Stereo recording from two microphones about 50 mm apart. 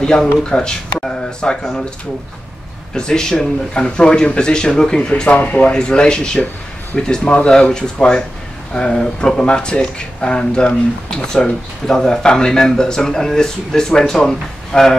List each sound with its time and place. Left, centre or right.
0.0 s speech: centre
2.9 s speech: centre